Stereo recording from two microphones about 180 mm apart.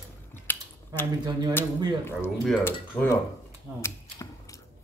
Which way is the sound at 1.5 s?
15° left (ahead or behind).